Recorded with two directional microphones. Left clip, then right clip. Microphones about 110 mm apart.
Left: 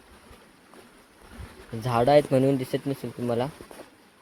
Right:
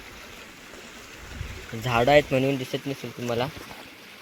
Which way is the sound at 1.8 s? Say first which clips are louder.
Right 1 dB; 15° left (ahead or behind).